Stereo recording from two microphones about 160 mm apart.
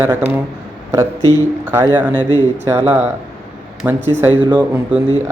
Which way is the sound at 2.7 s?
15° right (ahead or behind).